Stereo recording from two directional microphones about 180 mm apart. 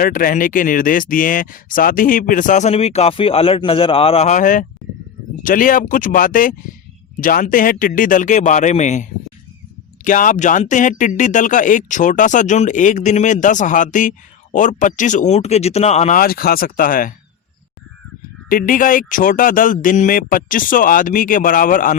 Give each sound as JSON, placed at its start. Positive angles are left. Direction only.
{"t": 0.0, "sound": "speech", "side_deg": 50}
{"t": 18.4, "sound": "speech", "side_deg": 50}